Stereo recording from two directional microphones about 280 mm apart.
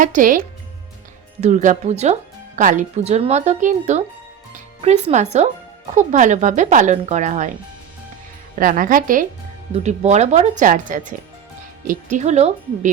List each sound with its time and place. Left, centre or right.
0.0 s speech: right
8.5 s speech: right